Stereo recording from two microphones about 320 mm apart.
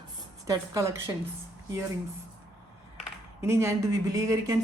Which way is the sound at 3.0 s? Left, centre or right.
Centre.